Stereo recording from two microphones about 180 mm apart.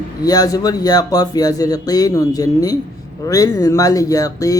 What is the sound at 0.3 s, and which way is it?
Mantra, 20° left (ahead or behind).